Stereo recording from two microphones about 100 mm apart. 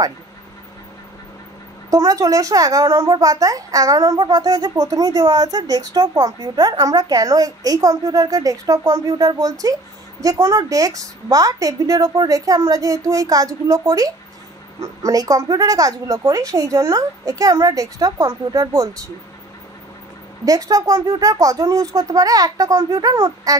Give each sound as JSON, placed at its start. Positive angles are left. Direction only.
{"t": 1.9, "sound": "a child's voice", "side_deg": -35}
{"t": 20.4, "sound": "a child's voice", "side_deg": -40}